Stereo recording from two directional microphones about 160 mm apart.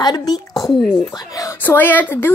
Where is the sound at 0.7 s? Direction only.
5° left (ahead or behind).